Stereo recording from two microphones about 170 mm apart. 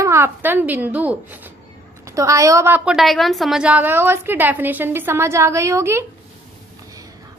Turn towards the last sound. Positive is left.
turn(degrees=-15)  # may be behind; listen again after turning